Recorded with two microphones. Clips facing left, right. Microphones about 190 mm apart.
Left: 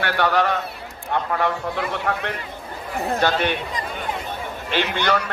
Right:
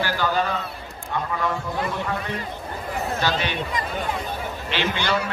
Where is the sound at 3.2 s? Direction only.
55° left (ahead or behind).